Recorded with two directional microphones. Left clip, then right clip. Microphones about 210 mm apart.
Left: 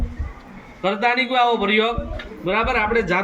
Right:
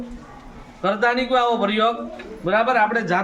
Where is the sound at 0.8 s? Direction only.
20° right (ahead or behind).